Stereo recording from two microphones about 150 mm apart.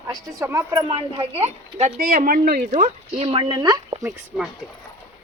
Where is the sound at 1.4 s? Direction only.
45° right (ahead or behind).